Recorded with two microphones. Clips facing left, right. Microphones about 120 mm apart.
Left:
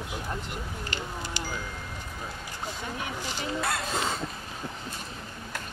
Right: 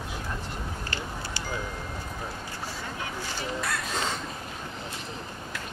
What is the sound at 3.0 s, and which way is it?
Speech, 15° left (ahead or behind).